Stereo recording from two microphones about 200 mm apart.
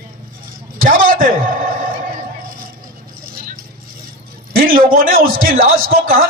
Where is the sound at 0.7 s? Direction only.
45° right (ahead or behind).